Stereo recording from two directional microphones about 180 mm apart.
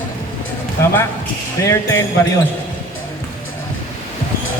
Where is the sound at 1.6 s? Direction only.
15° left (ahead or behind).